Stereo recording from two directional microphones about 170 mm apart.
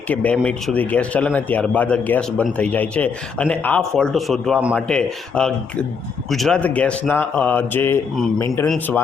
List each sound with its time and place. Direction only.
0.1 s speech: 10° left (ahead or behind)
8.6 s speech: 5° left (ahead or behind)